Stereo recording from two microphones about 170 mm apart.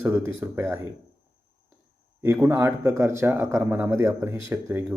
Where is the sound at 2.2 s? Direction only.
15° right (ahead or behind).